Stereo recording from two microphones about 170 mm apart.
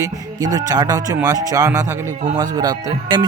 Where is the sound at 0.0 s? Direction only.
20° right (ahead or behind).